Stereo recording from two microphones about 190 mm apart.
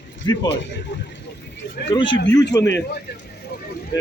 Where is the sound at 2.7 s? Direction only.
65° left (ahead or behind).